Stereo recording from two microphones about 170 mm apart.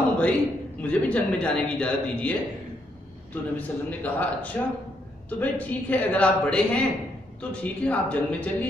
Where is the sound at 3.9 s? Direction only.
10° left (ahead or behind).